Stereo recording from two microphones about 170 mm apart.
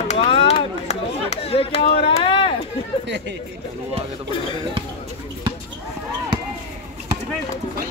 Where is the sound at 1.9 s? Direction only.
30° left (ahead or behind).